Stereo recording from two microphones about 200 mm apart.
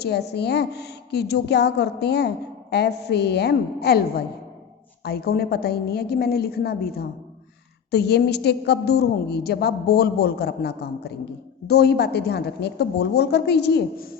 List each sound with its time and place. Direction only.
0.0 s a woman's voice: 55° left (ahead or behind)